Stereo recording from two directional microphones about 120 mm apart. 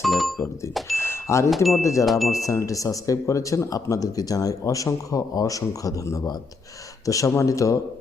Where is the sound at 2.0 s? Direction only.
Centre (ahead or behind).